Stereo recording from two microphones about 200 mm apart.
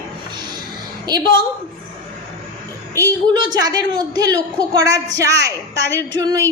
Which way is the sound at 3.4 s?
20° right (ahead or behind).